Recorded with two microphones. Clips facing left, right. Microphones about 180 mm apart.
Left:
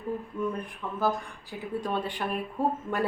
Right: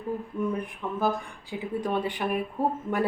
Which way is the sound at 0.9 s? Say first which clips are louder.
Right 1 dB; 20° right (ahead or behind).